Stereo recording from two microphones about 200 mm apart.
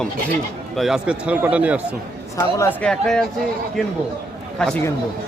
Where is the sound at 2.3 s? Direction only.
15° left (ahead or behind).